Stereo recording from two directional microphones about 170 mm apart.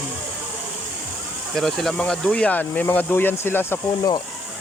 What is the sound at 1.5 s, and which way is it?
Speech, centre (ahead or behind).